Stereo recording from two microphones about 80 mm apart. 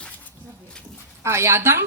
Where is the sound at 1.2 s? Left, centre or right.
Right.